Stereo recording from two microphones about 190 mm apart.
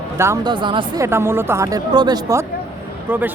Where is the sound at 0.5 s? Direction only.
25° right (ahead or behind).